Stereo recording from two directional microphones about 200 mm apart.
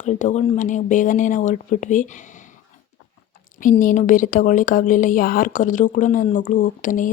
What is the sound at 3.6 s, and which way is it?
Speech, 40° left (ahead or behind).